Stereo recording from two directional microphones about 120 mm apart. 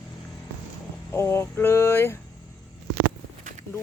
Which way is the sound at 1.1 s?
20° left (ahead or behind).